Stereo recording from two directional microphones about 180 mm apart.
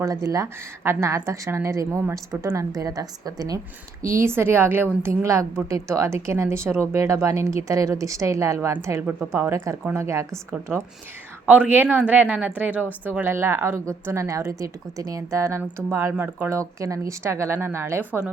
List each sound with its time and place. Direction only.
0.0 s a woman's voice: 20° right (ahead or behind)